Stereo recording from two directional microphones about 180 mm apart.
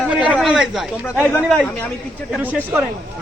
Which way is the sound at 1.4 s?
Centre (ahead or behind).